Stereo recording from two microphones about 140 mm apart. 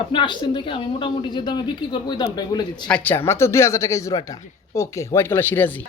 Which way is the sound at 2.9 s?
10° left (ahead or behind).